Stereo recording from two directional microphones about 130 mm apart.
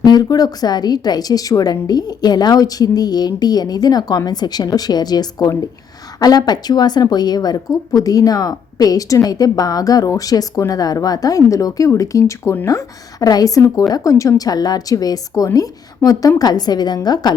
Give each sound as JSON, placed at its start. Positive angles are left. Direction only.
{"t": 0.0, "sound": "a woman's voice", "side_deg": 30}